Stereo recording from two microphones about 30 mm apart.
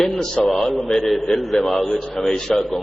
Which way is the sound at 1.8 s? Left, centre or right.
Left.